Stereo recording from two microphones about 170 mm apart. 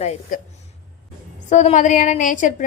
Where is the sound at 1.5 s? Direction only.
45° left (ahead or behind).